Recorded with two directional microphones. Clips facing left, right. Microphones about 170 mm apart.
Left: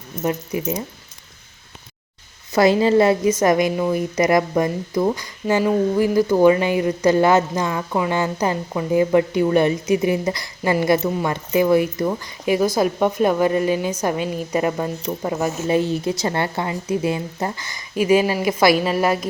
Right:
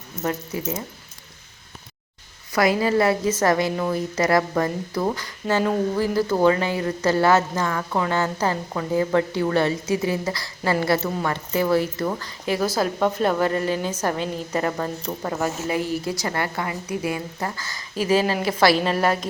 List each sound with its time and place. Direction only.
0.2 s a woman's voice: 15° left (ahead or behind)
2.5 s a woman's voice: 25° left (ahead or behind)
15.6 s speech: 25° left (ahead or behind); by 19.3 s 10° left (ahead or behind)